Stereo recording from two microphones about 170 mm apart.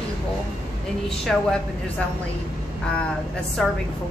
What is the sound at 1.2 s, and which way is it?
Speech, 5° left (ahead or behind).